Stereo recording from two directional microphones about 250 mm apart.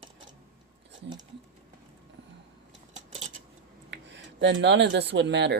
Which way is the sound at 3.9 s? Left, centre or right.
Right.